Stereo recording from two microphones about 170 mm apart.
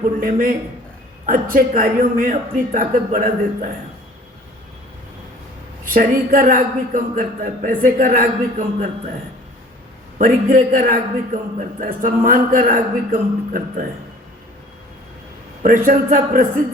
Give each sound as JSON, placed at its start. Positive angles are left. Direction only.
{"t": 0.0, "sound": "a man's voice", "side_deg": -50}
{"t": 5.8, "sound": "a man's voice", "side_deg": -55}
{"t": 10.2, "sound": "a man's voice", "side_deg": -55}
{"t": 15.9, "sound": "a man's voice", "side_deg": -50}